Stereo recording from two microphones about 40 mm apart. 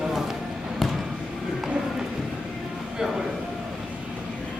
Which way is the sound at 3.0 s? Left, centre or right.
Centre.